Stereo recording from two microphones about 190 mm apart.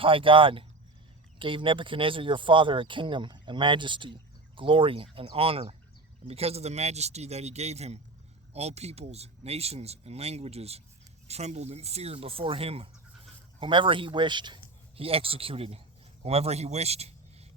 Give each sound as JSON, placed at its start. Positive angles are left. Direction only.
{"t": 0.0, "sound": "speech", "side_deg": -25}